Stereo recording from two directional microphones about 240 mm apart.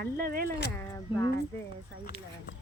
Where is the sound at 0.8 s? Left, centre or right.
Centre.